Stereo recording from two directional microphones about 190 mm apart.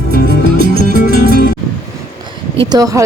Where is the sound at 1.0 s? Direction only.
45° left (ahead or behind).